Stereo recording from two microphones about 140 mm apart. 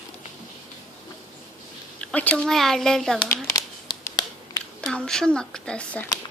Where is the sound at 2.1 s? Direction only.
10° left (ahead or behind).